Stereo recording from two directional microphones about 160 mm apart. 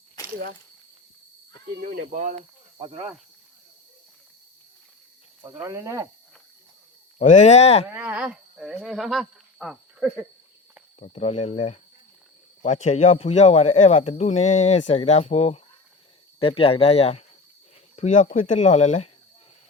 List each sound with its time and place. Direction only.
1.9 s speech: 60° right (ahead or behind)
2.7 s speech: 35° right (ahead or behind)
5.4 s speech: 20° right (ahead or behind)
7.2 s speech: 45° left (ahead or behind)
7.9 s speech: 10° right (ahead or behind)
11.0 s speech: 40° left (ahead or behind)